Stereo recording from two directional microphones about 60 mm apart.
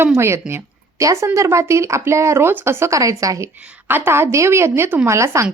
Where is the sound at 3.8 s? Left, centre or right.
Right.